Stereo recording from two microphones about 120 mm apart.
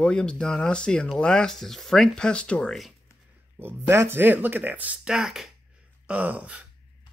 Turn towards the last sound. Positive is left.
turn(degrees=-10)  # may be behind; listen again after turning